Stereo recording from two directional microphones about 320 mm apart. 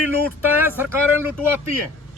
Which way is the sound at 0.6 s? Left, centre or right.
Centre.